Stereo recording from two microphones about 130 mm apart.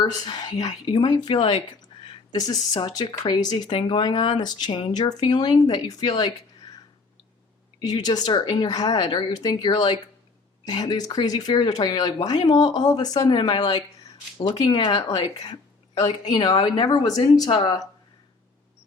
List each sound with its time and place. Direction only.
0.0 s speech: 30° left (ahead or behind)
7.8 s speech: 30° left (ahead or behind)
16.0 s a woman's voice: 50° left (ahead or behind)
16.3 s speech: 30° left (ahead or behind)